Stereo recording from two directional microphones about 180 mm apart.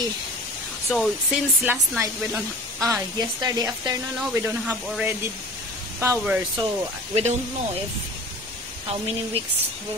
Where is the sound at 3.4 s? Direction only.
20° right (ahead or behind).